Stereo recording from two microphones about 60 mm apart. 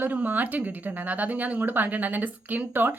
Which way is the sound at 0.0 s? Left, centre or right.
Right.